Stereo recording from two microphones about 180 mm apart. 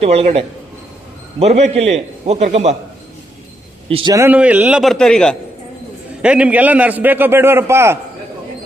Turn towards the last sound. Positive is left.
turn(degrees=-15)  # may be behind; listen again after turning